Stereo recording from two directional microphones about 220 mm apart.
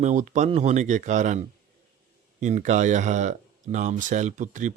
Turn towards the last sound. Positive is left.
turn(degrees=-35)  # may be behind; listen again after turning